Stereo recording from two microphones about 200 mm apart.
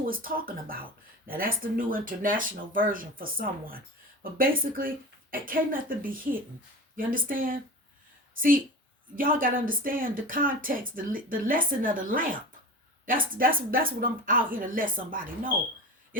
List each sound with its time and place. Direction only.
0.0 s speech: 45° right (ahead or behind)
5.9 s speech: 45° right (ahead or behind)